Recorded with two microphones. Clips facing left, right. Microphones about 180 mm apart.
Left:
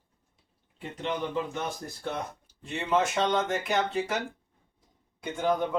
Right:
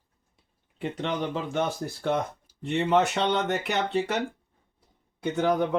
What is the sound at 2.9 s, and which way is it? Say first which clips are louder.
Speech: right 1 dB; 70° right (ahead or behind).